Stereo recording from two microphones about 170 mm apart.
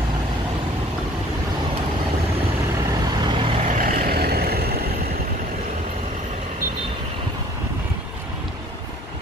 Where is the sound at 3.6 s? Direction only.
55° right (ahead or behind).